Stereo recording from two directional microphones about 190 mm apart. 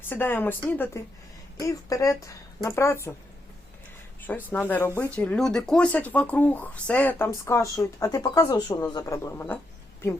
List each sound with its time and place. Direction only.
0.1 s speech: 10° left (ahead or behind)
4.4 s speech: 10° left (ahead or behind)